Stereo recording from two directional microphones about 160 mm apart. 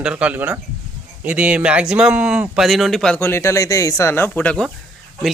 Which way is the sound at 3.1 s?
15° left (ahead or behind).